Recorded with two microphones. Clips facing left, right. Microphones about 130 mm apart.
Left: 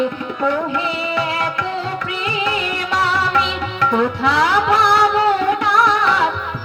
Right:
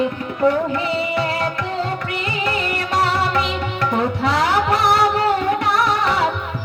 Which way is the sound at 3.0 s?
45° right (ahead or behind).